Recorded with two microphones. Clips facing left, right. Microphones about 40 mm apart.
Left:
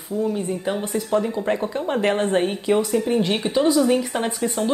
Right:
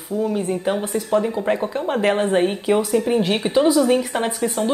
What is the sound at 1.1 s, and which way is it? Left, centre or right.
A woman's voice, centre.